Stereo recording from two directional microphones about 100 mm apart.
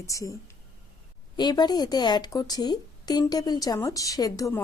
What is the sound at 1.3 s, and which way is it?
Speech, 45° left (ahead or behind).